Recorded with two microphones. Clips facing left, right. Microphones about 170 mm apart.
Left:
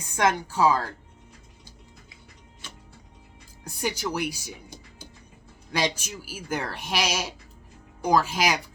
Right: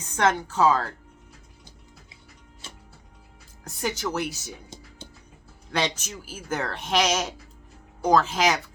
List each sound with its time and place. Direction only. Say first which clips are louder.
0.0 s speech: right 1 dB; 10° left (ahead or behind)
2.6 s music: even; 25° right (ahead or behind)
3.6 s speech: even; 10° left (ahead or behind)
5.0 s music: right 2 dB; 25° right (ahead or behind)
5.7 s speech: even; 10° left (ahead or behind)